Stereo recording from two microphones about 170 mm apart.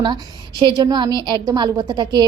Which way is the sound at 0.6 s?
25° right (ahead or behind).